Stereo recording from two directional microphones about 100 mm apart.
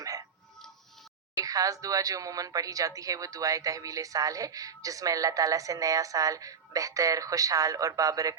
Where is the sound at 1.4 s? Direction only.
35° right (ahead or behind).